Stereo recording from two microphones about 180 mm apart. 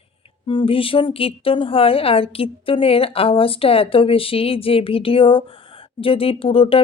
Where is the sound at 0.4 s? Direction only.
30° left (ahead or behind).